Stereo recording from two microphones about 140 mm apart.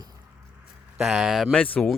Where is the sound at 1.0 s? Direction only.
Centre (ahead or behind).